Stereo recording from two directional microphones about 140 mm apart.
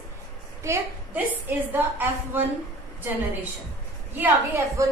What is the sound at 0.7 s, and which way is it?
A woman's voice, 20° right (ahead or behind).